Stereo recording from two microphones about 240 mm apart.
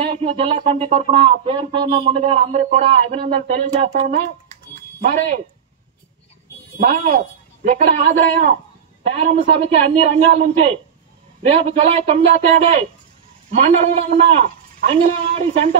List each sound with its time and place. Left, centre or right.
0.0 s a man's voice: right
6.8 s a man's voice: right
13.5 s speech: right